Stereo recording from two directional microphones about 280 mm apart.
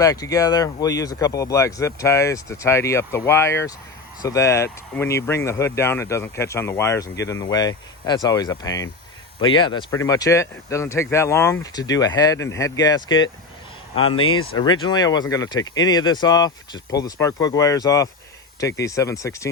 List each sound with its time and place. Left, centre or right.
0.0 s speech: centre